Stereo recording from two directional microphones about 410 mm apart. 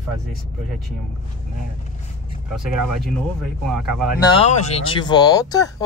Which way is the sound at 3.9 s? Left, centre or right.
Centre.